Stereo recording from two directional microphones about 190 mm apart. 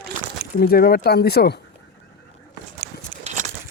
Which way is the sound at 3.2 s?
40° right (ahead or behind).